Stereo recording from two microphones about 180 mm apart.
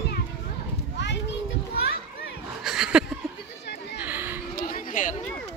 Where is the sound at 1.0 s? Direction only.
75° left (ahead or behind).